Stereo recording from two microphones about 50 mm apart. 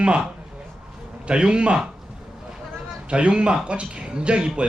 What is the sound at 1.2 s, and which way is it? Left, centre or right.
Speech, centre.